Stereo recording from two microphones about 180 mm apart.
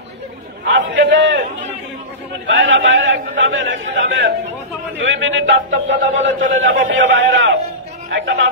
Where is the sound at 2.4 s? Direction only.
90° right.